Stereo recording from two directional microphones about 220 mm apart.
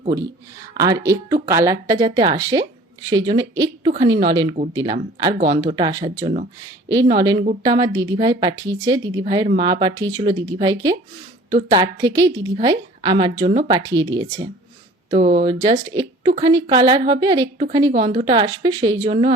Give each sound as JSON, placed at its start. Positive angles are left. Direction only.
{"t": 0.8, "sound": "a woman's voice", "side_deg": -15}
{"t": 15.1, "sound": "speech", "side_deg": -35}
{"t": 16.0, "sound": "a woman's voice", "side_deg": -20}